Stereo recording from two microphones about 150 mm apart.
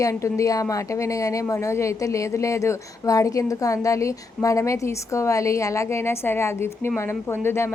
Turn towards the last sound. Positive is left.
turn(degrees=15)  # may be behind; listen again after turning